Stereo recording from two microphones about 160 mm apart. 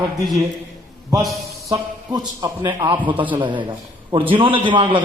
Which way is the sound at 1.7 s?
20° right (ahead or behind).